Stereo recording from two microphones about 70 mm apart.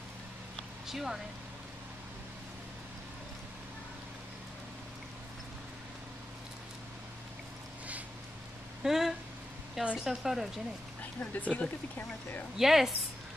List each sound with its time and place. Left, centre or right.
0.8 s speech: centre
8.8 s a sound: centre
10.0 s speech: centre
11.1 s speech: left
12.5 s speech: centre